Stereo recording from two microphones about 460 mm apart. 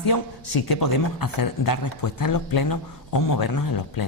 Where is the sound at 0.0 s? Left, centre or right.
Left.